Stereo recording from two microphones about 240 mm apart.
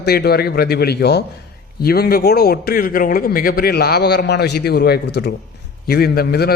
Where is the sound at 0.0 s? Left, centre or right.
Left.